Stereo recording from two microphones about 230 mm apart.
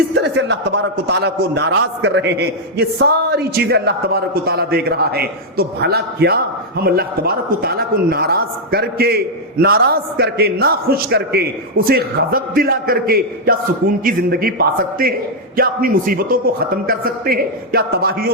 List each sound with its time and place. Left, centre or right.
0.2 s a man's voice: right